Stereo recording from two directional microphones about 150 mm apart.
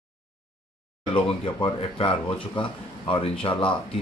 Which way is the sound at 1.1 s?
35° left (ahead or behind).